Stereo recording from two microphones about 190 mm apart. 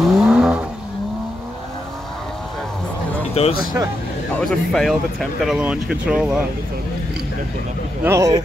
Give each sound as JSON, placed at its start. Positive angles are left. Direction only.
{"t": 0.0, "sound": "vehicle", "side_deg": -5}
{"t": 3.4, "sound": "speech", "side_deg": 30}
{"t": 4.4, "sound": "speech", "side_deg": 5}
{"t": 8.0, "sound": "speech", "side_deg": -15}